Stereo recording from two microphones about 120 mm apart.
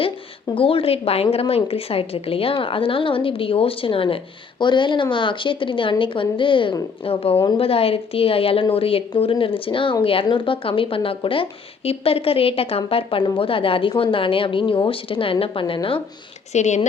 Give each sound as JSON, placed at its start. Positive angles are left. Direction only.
{"t": 0.5, "sound": "a woman's voice", "side_deg": 50}
{"t": 16.5, "sound": "speech", "side_deg": 75}